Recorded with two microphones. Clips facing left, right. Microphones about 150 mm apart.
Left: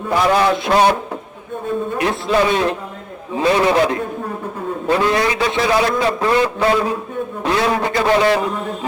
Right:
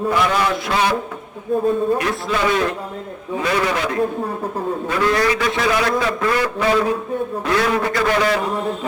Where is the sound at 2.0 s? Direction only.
25° left (ahead or behind).